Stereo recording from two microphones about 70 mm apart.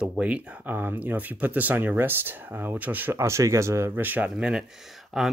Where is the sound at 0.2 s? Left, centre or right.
Centre.